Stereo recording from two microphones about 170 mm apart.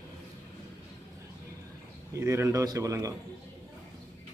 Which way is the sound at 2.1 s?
15° right (ahead or behind).